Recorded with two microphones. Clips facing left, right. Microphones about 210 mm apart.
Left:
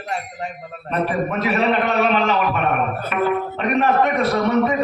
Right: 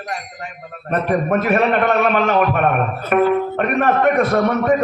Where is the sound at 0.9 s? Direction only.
50° right (ahead or behind).